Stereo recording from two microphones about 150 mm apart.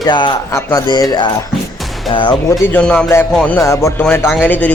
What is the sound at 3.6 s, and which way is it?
Speech, 20° left (ahead or behind).